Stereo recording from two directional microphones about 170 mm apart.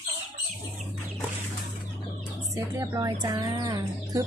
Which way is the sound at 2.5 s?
20° right (ahead or behind).